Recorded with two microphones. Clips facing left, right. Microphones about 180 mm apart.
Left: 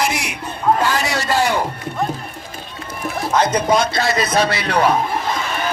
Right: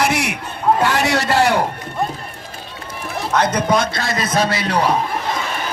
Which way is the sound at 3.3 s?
60° right (ahead or behind).